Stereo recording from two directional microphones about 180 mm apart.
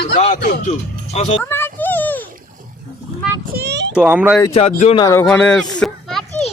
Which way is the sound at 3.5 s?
65° right (ahead or behind).